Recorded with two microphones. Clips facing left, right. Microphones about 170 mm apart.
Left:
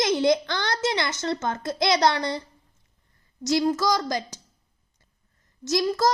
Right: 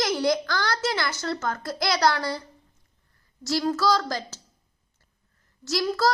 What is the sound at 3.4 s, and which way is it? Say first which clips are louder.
Speech: left 1 dB; 20° left (ahead or behind).